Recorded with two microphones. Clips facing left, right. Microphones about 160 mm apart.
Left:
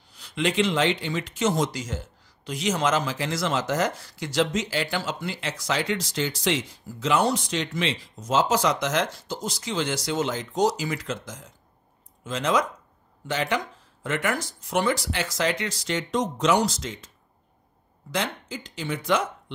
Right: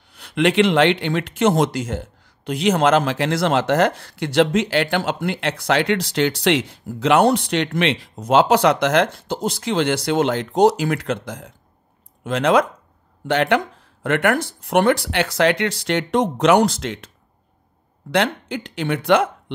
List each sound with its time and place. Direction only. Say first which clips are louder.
0.1 s speech: right 8 dB; 60° right (ahead or behind)
18.1 s speech: right 9 dB; 65° right (ahead or behind)